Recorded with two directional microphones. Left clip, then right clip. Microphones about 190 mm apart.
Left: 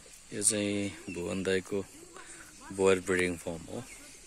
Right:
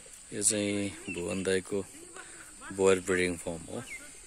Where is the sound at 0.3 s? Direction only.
Centre (ahead or behind).